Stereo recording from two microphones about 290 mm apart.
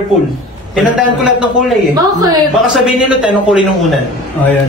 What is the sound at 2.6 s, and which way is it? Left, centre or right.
A man's voice, centre.